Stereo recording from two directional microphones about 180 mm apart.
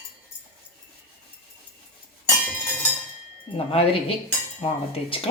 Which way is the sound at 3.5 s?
30° left (ahead or behind).